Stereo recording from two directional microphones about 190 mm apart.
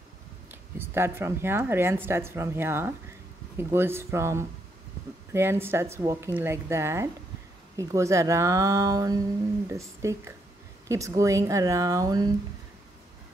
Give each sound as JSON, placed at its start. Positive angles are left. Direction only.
{"t": 0.5, "sound": "speech", "side_deg": -10}